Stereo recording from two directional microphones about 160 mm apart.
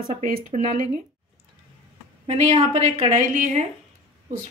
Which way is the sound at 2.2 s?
45° right (ahead or behind).